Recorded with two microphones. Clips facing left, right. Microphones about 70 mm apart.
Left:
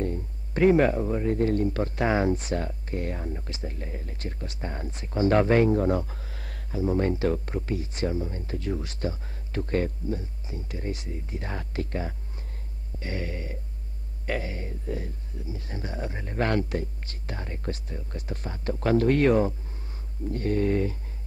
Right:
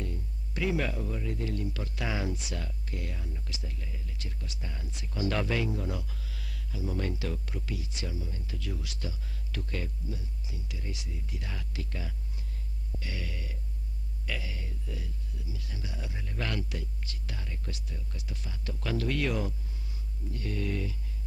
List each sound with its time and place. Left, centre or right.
0.0 s speech: left